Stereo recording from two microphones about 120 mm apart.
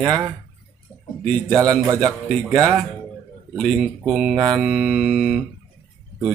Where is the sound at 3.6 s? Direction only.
5° left (ahead or behind).